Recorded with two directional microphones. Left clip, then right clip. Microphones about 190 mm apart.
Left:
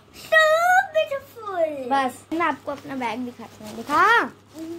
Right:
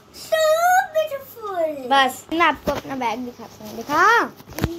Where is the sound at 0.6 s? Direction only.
10° left (ahead or behind).